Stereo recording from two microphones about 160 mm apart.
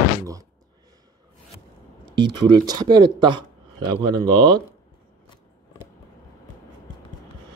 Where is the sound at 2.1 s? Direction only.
25° right (ahead or behind).